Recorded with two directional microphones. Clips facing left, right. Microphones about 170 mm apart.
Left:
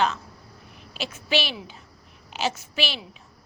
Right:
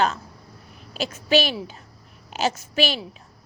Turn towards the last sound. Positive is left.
turn(degrees=-45)  # may be behind; listen again after turning